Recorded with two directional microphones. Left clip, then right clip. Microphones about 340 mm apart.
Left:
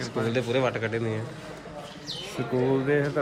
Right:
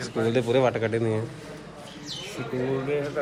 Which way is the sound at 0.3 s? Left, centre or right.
Centre.